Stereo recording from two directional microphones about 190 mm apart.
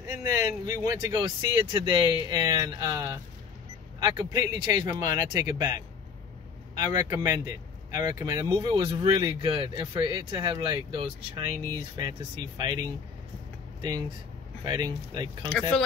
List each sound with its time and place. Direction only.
0.1 s speech: 15° right (ahead or behind)
6.8 s speech: 20° right (ahead or behind)
13.7 s speech: 20° right (ahead or behind)